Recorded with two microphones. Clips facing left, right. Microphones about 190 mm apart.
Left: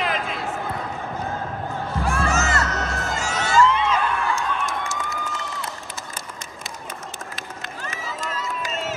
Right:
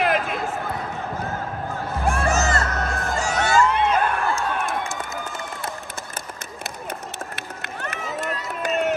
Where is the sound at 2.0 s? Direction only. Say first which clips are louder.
Right 2 dB; 50° right (ahead or behind).